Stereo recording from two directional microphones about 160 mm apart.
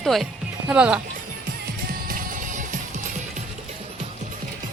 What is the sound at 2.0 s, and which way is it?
Music, 60° right (ahead or behind).